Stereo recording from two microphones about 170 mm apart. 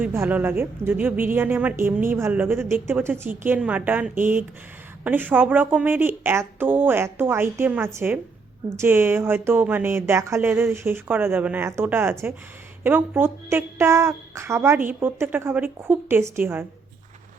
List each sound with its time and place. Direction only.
0.0 s a woman's voice: 10° right (ahead or behind)